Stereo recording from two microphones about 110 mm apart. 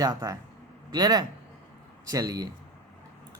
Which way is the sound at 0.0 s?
30° right (ahead or behind).